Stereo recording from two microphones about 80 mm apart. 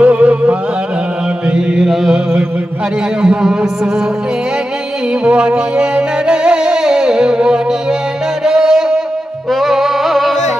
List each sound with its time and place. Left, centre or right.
0.0 s music: centre
1.5 s mantra: centre
3.2 s music: centre
5.2 s music: centre